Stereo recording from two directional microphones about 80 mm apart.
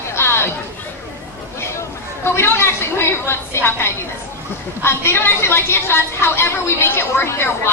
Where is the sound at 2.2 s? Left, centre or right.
Left.